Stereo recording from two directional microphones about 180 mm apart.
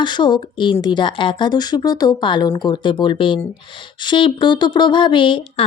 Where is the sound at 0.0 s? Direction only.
25° left (ahead or behind).